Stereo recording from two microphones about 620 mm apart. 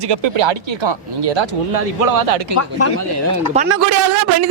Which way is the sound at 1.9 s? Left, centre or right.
Right.